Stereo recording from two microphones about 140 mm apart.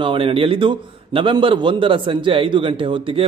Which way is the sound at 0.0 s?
40° right (ahead or behind).